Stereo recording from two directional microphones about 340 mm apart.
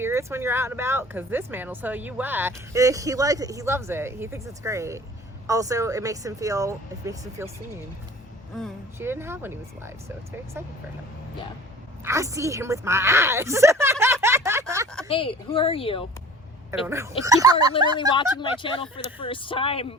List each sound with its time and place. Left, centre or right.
0.0 s speech: centre
8.5 s speech: centre
12.0 s a woman's voice: centre
15.1 s speech: centre
16.8 s speech: centre
18.2 s speech: centre